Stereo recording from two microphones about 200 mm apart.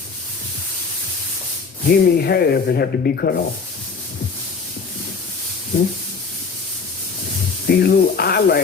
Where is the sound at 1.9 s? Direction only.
50° left (ahead or behind).